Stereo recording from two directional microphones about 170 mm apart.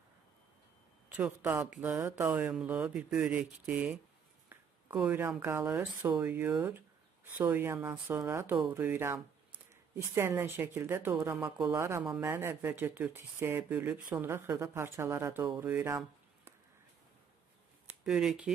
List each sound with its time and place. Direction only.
1.0 s a man's voice: 10° right (ahead or behind)
18.0 s speech: centre (ahead or behind)